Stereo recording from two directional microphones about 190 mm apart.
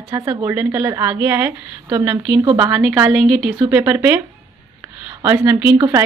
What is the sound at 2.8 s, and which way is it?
A woman's voice, 5° right (ahead or behind).